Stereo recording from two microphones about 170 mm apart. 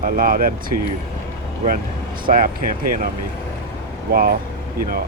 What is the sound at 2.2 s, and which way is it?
Speech, 55° right (ahead or behind).